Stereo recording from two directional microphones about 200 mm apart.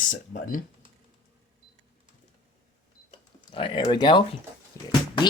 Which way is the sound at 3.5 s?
25° left (ahead or behind).